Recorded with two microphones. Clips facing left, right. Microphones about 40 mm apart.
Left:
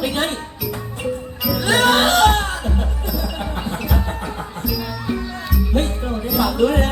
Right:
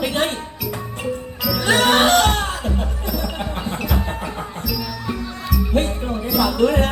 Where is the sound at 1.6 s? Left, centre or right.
Right.